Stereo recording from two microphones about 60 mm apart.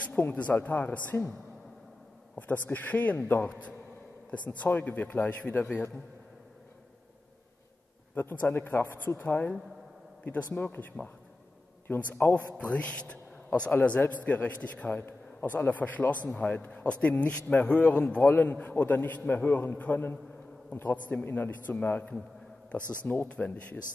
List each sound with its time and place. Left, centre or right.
0.1 s a man's voice: left
2.3 s a man's voice: left
8.1 s a man's voice: left
12.5 s a man's voice: left